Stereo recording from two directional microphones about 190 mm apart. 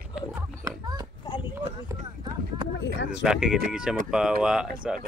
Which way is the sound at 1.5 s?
20° right (ahead or behind).